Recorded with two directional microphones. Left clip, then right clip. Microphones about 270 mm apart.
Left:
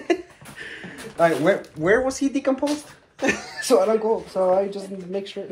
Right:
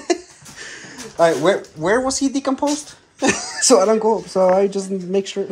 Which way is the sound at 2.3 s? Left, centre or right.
Right.